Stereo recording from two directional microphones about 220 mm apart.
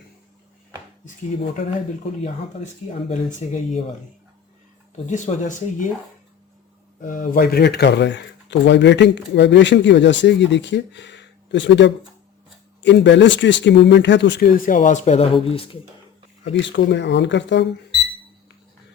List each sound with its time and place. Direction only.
3.4 s speech: 30° left (ahead or behind)
5.1 s speech: 35° left (ahead or behind)
7.0 s speech: 40° left (ahead or behind)
16.4 s speech: 55° left (ahead or behind)